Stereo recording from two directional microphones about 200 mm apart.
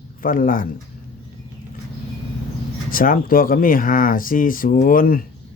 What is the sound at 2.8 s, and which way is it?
Speech, 45° left (ahead or behind).